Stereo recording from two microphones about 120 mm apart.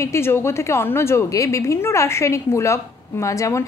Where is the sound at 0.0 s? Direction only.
20° left (ahead or behind).